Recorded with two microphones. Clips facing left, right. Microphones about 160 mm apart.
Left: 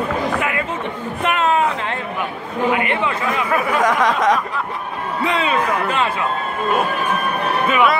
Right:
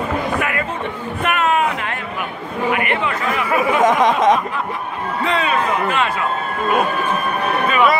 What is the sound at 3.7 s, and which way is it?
Speech, 20° right (ahead or behind).